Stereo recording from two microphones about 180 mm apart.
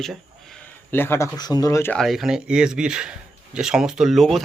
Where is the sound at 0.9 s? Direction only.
10° left (ahead or behind).